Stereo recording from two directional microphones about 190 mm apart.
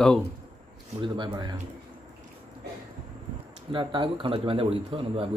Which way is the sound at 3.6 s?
25° right (ahead or behind).